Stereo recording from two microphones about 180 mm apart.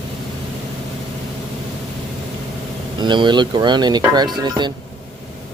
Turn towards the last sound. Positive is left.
turn(degrees=-25)  # may be behind; listen again after turning